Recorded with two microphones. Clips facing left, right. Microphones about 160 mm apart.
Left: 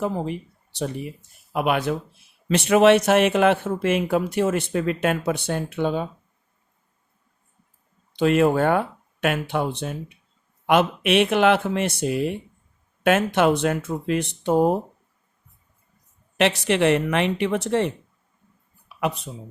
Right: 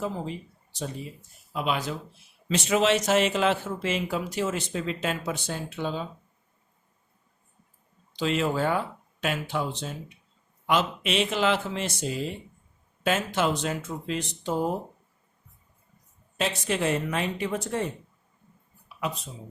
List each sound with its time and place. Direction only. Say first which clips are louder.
0.0 s speech: left 6 dB; 65° left (ahead or behind)
8.1 s speech: left 8 dB; 55° left (ahead or behind)
16.4 s speech: left 8 dB; 75° left (ahead or behind)
18.9 s speech: left 6 dB; 65° left (ahead or behind)